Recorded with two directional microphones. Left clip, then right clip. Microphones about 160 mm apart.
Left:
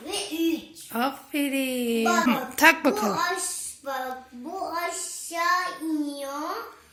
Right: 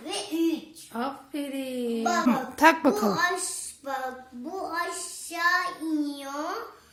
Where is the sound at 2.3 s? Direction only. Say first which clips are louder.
Right 1 dB; 20° right (ahead or behind).